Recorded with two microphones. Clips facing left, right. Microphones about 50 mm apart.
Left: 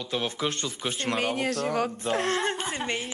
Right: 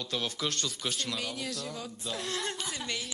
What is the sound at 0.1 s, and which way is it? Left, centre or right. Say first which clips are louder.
Speech: left 5 dB; left.